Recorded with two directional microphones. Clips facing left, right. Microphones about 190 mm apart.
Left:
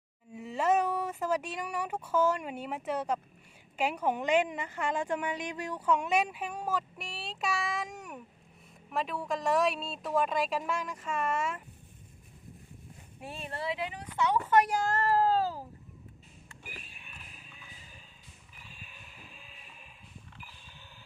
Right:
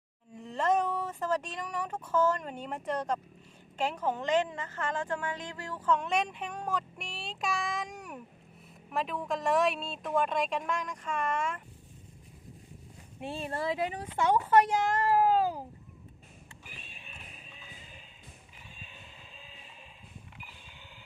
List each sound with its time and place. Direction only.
0.3 s a woman's voice: 5° left (ahead or behind)
13.1 s speech: 30° right (ahead or behind)
13.6 s speech: 45° right (ahead or behind)
14.5 s speech: 25° right (ahead or behind)
17.0 s music: 25° right (ahead or behind)
20.4 s a sound: 20° right (ahead or behind)